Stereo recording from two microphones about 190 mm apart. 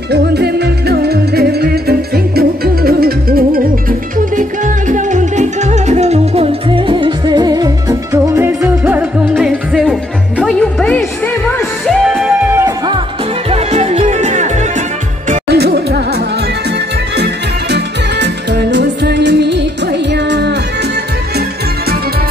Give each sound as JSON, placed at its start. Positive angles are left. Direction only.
{"t": 0.1, "sound": "music", "side_deg": -60}
{"t": 12.5, "sound": "music", "side_deg": -20}
{"t": 13.5, "sound": "music", "side_deg": -35}
{"t": 15.4, "sound": "music", "side_deg": -60}
{"t": 17.2, "sound": "music", "side_deg": -60}